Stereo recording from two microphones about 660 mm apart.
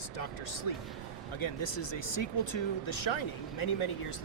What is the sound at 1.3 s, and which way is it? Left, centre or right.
Speech, left.